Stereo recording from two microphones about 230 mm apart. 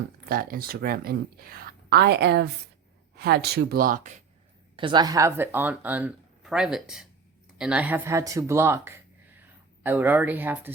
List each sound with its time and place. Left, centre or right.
0.3 s speech: right
4.8 s speech: centre